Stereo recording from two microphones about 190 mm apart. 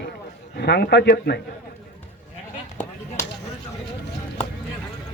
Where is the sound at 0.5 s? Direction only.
60° left (ahead or behind).